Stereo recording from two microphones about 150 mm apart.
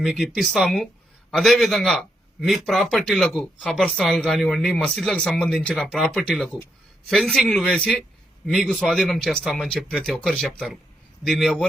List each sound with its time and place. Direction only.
0.0 s a man's voice: centre (ahead or behind)